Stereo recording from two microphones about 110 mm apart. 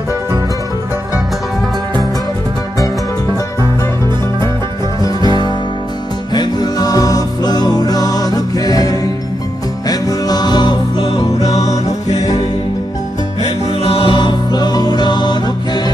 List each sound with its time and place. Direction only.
5.0 s music: 40° left (ahead or behind)
13.4 s music: 60° left (ahead or behind); by 15.8 s 40° left (ahead or behind)